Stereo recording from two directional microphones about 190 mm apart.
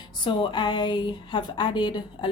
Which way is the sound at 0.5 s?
25° left (ahead or behind).